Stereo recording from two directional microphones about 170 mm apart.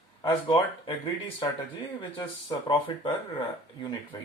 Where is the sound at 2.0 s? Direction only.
25° left (ahead or behind).